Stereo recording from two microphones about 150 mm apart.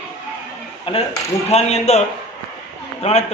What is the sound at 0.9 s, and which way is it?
A man's voice, 35° left (ahead or behind).